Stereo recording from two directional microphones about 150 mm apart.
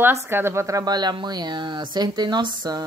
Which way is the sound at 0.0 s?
15° right (ahead or behind).